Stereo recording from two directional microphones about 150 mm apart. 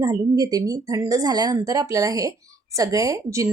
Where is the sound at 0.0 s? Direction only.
25° right (ahead or behind).